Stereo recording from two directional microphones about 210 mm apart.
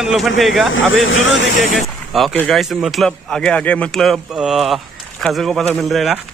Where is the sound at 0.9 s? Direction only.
65° left (ahead or behind).